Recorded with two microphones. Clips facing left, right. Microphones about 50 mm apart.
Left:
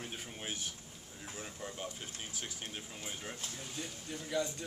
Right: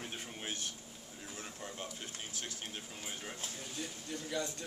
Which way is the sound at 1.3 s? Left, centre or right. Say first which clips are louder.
Left 2 dB; centre.